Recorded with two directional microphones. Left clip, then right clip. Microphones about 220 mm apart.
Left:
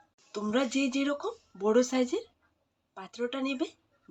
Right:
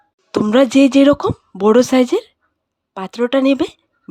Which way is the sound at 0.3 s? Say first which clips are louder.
Right 17 dB; 55° right (ahead or behind).